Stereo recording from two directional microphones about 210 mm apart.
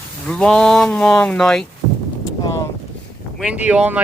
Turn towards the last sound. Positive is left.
turn(degrees=-5)  # may be behind; listen again after turning